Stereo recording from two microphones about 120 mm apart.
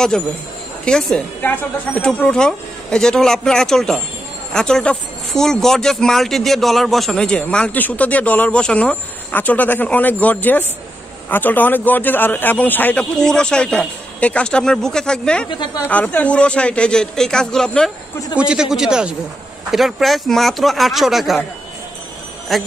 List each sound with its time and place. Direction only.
0.8 s speech: 5° left (ahead or behind)
15.5 s speech: 40° left (ahead or behind)
15.8 s speech: 10° left (ahead or behind)
18.3 s a man's voice: 10° right (ahead or behind)
22.5 s speech: centre (ahead or behind)